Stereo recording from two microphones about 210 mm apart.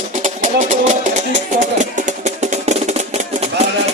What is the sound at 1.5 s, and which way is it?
Music, 40° right (ahead or behind).